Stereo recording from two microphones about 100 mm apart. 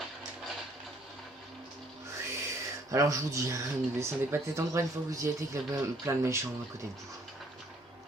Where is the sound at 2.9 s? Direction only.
35° right (ahead or behind).